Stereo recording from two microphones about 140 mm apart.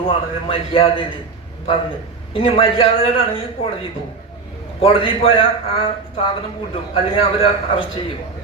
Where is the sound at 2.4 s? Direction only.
40° left (ahead or behind).